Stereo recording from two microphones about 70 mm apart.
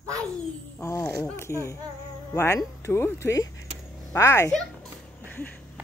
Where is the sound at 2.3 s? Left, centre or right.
Left.